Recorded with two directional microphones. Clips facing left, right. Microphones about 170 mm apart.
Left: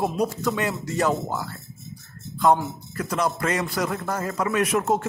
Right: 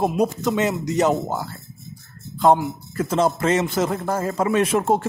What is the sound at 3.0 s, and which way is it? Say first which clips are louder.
Speech: right 5 dB; 25° right (ahead or behind).